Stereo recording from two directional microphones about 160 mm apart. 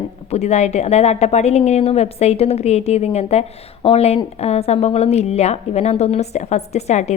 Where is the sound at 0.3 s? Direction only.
45° left (ahead or behind).